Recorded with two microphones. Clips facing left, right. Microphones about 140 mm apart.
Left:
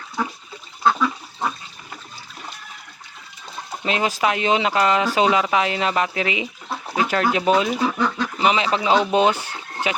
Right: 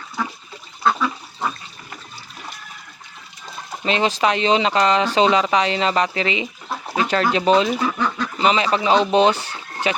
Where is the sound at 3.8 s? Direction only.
5° left (ahead or behind).